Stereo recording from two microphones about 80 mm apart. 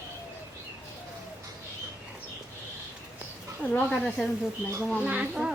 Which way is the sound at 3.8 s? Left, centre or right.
Centre.